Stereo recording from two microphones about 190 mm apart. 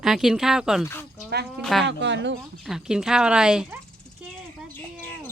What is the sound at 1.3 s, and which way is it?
Speech, 60° right (ahead or behind).